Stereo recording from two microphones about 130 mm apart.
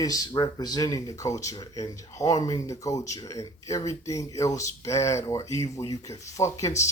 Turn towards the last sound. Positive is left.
turn(degrees=25)  # may be behind; listen again after turning